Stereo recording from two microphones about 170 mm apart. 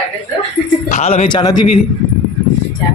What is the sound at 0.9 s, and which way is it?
Speech, 40° left (ahead or behind).